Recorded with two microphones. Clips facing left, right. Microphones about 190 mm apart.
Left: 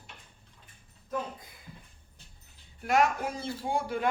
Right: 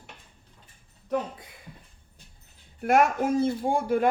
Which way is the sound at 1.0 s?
75° right (ahead or behind).